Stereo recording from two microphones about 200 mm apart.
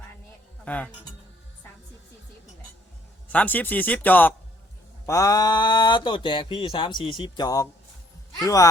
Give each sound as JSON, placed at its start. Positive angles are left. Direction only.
{"t": 0.6, "sound": "speech", "side_deg": 5}
{"t": 3.3, "sound": "speech", "side_deg": 10}